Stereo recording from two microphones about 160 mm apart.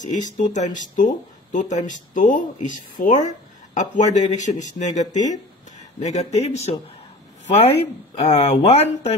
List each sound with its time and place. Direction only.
0.0 s speech: 50° left (ahead or behind)